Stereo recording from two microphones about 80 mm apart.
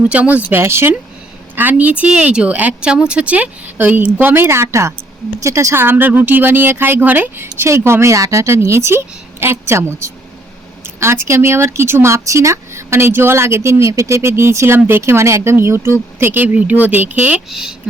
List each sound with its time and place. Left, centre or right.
0.1 s speech: centre
0.6 s speech: right
17.5 s speech: centre